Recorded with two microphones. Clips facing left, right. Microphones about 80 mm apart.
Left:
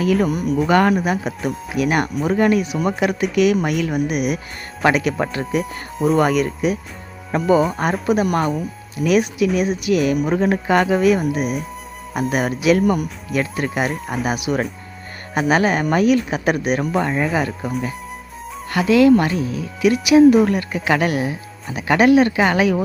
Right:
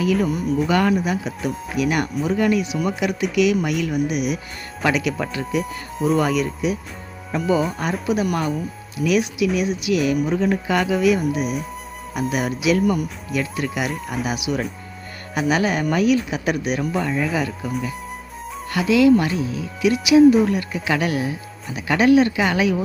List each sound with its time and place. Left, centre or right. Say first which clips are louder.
0.0 s speech: left 2 dB; left
18.7 s speech: left 2 dB; left